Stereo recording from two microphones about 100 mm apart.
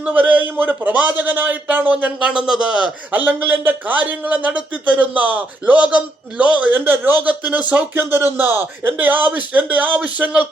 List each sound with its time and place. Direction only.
0.0 s speech: 15° right (ahead or behind)